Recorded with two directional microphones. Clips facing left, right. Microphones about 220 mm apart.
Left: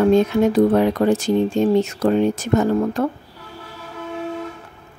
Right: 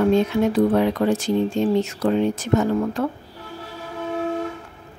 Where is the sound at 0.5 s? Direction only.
45° left (ahead or behind).